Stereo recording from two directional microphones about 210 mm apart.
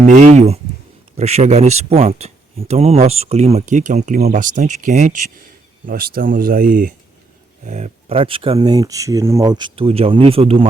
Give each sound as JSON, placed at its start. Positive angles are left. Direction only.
{"t": 0.1, "sound": "speech", "side_deg": -35}